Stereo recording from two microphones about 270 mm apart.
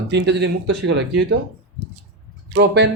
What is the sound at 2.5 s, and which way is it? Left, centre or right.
Speech, right.